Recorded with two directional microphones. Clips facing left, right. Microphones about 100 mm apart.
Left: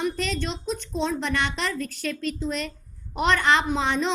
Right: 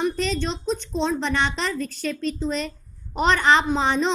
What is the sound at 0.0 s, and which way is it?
A woman's voice, 25° right (ahead or behind).